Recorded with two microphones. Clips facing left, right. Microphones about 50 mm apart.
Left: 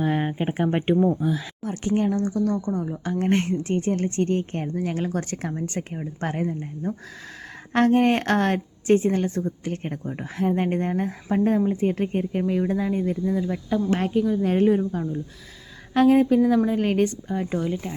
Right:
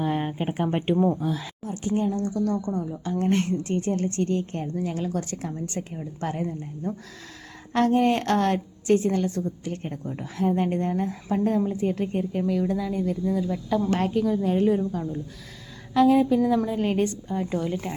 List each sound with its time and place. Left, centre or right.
0.0 s a sound: centre
0.6 s speech: centre
1.8 s speech: left
2.2 s speech: left
7.7 s speech: left; by 14.3 s centre
14.4 s speech: left
16.0 s speech: left
17.4 s speech: centre
17.7 s speech: centre